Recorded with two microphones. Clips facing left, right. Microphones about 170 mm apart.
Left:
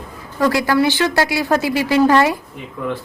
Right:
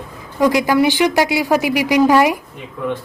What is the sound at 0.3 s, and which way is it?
A woman's voice, 15° right (ahead or behind).